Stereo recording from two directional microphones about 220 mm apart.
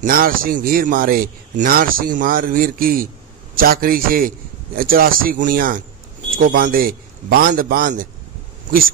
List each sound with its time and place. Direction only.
0.0 s speech: 40° right (ahead or behind)